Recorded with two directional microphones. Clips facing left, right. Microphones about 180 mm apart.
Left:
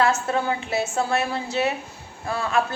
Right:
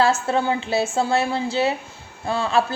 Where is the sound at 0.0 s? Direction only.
30° right (ahead or behind).